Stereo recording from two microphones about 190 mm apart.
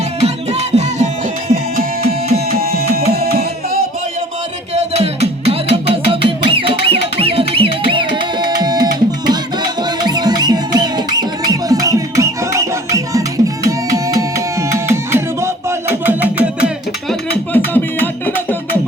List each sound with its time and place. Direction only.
0.2 s music: 35° right (ahead or behind)
1.7 s music: 50° right (ahead or behind)
4.7 s music: 35° right (ahead or behind); by 17.2 s 5° right (ahead or behind)
17.5 s music: 10° left (ahead or behind)